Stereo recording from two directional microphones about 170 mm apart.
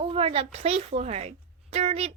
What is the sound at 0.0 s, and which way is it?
A child's voice, 35° right (ahead or behind).